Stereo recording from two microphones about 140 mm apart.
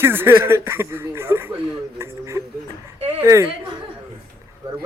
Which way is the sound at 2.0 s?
20° right (ahead or behind).